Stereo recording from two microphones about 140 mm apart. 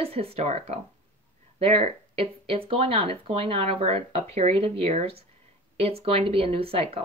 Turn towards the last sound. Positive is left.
turn(degrees=-45)  # may be behind; listen again after turning